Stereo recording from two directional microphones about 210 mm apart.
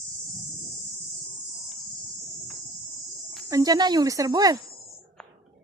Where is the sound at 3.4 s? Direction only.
15° right (ahead or behind).